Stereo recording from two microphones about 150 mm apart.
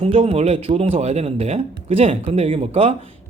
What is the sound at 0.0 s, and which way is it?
Speech, 40° right (ahead or behind).